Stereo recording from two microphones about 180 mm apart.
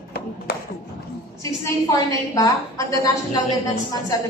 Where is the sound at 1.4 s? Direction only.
15° left (ahead or behind).